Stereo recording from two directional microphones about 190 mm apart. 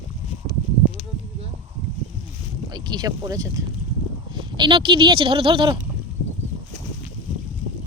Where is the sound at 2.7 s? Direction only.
20° right (ahead or behind).